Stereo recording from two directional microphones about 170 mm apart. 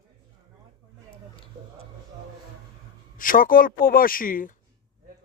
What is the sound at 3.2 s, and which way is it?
Speech, 55° left (ahead or behind).